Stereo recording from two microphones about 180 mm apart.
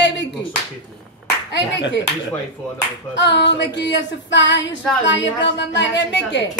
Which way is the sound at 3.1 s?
75° left (ahead or behind).